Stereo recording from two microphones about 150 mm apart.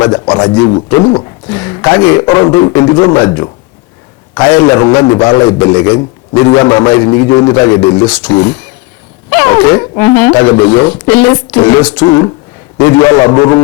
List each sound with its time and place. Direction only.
0.0 s a man's voice: 25° left (ahead or behind)
4.5 s a man's voice: 25° left (ahead or behind)
8.0 s speech: 5° left (ahead or behind)
9.3 s a man's voice: 20° left (ahead or behind)
10.4 s a man's voice: 25° left (ahead or behind)